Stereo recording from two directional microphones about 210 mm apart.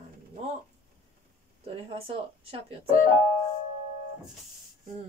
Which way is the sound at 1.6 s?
25° right (ahead or behind).